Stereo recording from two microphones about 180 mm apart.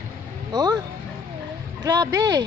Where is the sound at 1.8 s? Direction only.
20° right (ahead or behind).